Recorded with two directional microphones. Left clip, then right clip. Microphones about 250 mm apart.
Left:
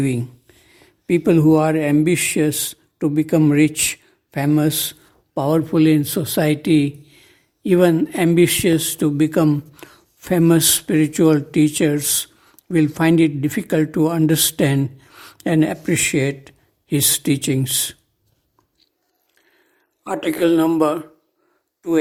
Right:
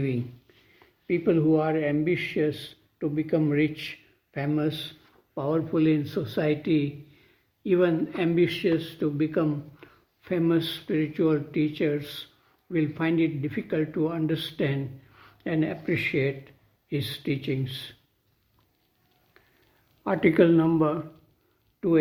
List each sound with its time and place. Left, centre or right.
1.0 s a man's voice: left
20.1 s speech: left